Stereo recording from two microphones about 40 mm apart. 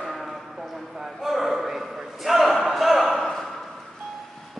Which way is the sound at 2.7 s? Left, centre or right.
Centre.